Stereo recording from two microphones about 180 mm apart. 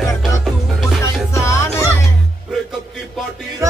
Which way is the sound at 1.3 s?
15° left (ahead or behind).